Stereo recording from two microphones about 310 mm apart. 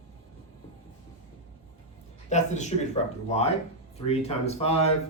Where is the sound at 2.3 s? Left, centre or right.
Left.